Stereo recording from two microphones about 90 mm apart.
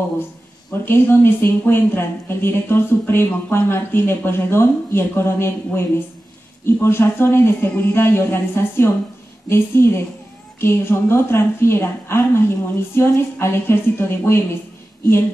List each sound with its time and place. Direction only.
0.8 s a woman's voice: 25° left (ahead or behind)